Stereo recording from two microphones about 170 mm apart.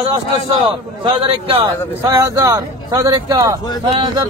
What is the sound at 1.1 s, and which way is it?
Speech, 30° right (ahead or behind).